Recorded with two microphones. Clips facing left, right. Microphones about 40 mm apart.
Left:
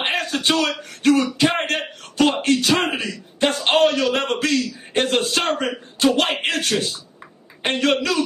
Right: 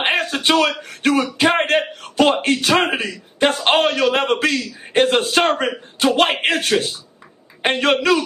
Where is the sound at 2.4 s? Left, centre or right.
Right.